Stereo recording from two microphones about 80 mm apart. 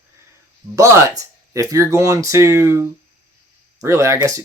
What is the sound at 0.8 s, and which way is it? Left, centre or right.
Speech, right.